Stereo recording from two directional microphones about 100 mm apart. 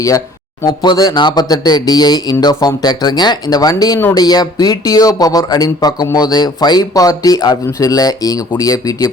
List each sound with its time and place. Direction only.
0.7 s speech: 45° left (ahead or behind)